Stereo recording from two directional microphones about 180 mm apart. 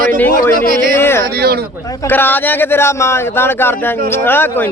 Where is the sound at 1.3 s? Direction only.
60° right (ahead or behind).